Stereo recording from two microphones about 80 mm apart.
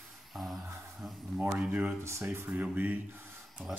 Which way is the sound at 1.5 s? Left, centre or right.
Centre.